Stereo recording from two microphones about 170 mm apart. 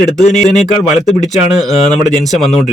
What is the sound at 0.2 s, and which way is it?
Speech, 45° left (ahead or behind).